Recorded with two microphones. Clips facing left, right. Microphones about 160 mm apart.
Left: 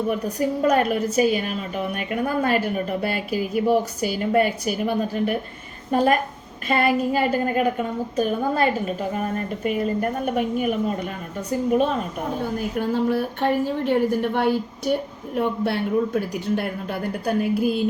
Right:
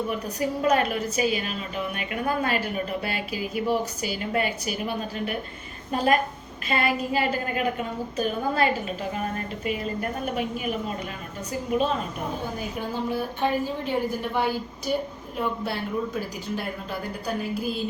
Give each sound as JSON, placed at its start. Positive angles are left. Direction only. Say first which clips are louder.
{"t": 0.1, "sound": "a woman's voice", "louder": "left 4 dB", "side_deg": 50}
{"t": 6.7, "sound": "a woman's voice", "louder": "left 5 dB", "side_deg": 45}
{"t": 12.5, "sound": "a woman's voice", "louder": "left 7 dB", "side_deg": 70}